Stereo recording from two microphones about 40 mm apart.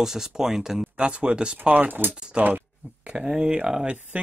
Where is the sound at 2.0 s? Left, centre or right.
Right.